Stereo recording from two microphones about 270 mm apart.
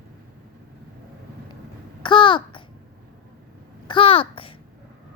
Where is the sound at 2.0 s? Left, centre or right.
Centre.